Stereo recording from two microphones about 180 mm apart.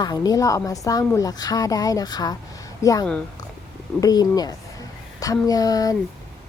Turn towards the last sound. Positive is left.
turn(degrees=20)  # may be behind; listen again after turning